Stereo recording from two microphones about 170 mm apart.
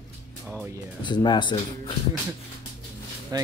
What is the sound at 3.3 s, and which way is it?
Speech, 25° right (ahead or behind).